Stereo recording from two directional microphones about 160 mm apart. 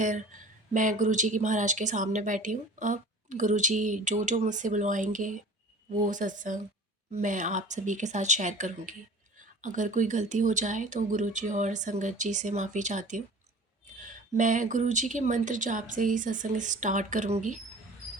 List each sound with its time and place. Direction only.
0.7 s speech: 55° right (ahead or behind)